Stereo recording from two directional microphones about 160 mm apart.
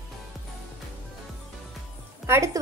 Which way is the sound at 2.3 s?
20° right (ahead or behind).